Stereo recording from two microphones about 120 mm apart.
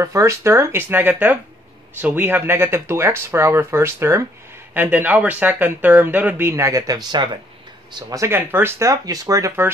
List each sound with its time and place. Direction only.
0.0 s speech: 25° right (ahead or behind)